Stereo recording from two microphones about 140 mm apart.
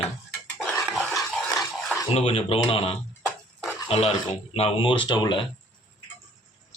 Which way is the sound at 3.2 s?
10° left (ahead or behind).